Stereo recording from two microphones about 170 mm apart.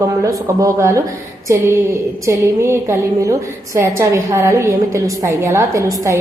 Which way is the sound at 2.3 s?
15° right (ahead or behind).